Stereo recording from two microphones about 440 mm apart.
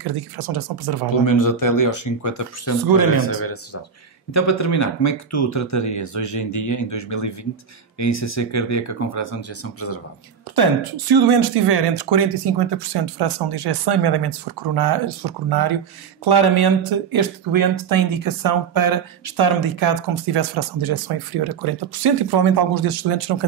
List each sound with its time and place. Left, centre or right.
0.0 s speech: right
1.2 s speech: left
3.3 s speech: left
10.5 s speech: right